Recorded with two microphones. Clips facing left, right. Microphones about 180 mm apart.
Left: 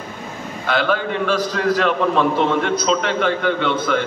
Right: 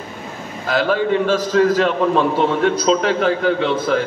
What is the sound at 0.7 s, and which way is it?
A man's voice, 40° right (ahead or behind).